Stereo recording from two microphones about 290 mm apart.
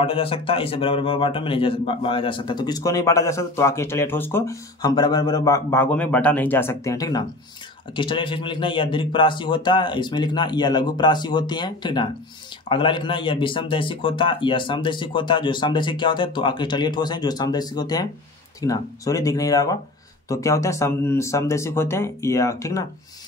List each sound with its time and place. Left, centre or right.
0.0 s a man's voice: centre